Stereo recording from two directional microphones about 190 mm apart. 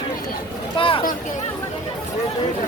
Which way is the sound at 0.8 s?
30° left (ahead or behind).